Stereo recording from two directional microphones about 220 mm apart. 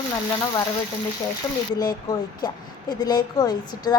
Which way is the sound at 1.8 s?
20° left (ahead or behind).